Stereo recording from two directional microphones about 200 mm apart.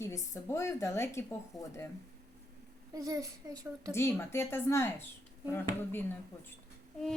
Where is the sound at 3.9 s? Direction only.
10° left (ahead or behind).